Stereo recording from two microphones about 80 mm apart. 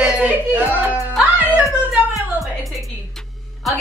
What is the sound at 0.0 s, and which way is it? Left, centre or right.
Music, centre.